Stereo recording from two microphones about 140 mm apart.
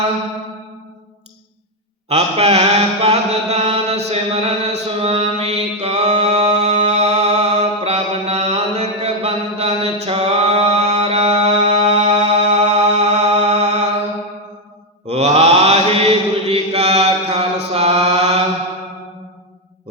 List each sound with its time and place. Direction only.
2.0 s mantra: 45° right (ahead or behind)
15.0 s mantra: 50° right (ahead or behind)